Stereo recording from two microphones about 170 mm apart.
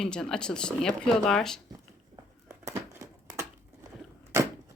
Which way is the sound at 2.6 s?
15° right (ahead or behind).